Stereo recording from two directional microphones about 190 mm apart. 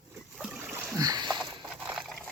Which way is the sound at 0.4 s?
10° right (ahead or behind).